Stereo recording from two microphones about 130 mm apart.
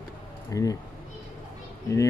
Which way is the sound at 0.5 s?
25° left (ahead or behind).